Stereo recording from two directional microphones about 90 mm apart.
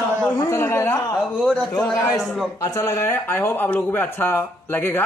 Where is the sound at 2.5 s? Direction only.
40° left (ahead or behind).